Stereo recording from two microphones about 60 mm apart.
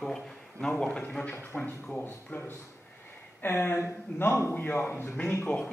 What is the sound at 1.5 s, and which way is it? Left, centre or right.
Speech, left.